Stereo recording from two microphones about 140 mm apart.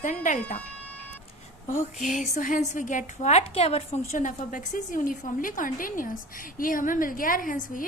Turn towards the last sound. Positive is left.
turn(degrees=70)  # may be behind; listen again after turning